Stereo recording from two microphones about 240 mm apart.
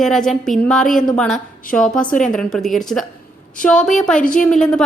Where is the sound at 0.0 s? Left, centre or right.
Centre.